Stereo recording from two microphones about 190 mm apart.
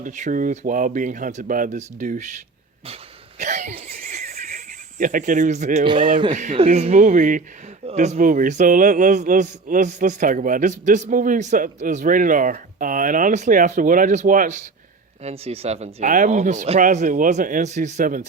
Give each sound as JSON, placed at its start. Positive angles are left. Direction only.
{"t": 0.0, "sound": "speech", "side_deg": -45}
{"t": 2.8, "sound": "cough", "side_deg": -35}
{"t": 5.8, "sound": "speech", "side_deg": -25}
{"t": 6.3, "sound": "speech", "side_deg": -40}